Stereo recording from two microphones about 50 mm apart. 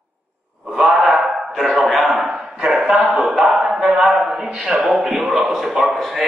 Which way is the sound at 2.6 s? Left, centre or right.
Centre.